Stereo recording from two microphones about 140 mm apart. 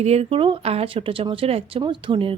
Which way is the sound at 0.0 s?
50° right (ahead or behind).